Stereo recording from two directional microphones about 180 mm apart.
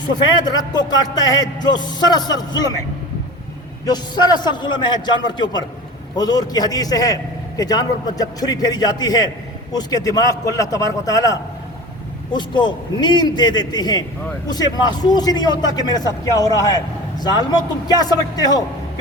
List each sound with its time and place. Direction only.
0.0 s a man's voice: 25° left (ahead or behind)
3.8 s a man's voice: 25° left (ahead or behind)
15.1 s a man's voice: 20° left (ahead or behind)